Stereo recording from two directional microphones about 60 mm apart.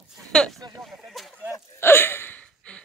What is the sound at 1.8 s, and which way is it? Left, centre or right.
Hiccup, left.